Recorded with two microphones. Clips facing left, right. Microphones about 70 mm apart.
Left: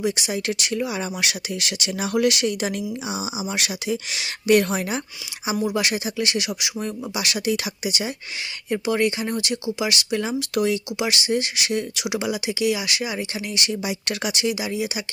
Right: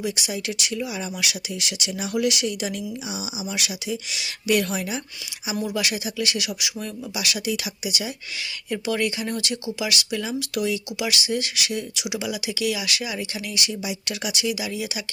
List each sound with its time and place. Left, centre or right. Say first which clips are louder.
0.0 s speech: left 4 dB; left
8.7 s speech: left 3 dB; left
13.6 s speech: left 3 dB; left